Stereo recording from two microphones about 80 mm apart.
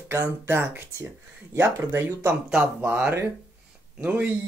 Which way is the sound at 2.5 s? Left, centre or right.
Centre.